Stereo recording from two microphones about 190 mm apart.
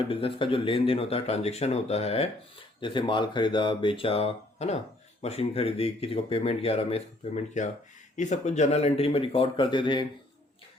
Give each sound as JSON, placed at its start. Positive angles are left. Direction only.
{"t": 0.1, "sound": "speech", "side_deg": 30}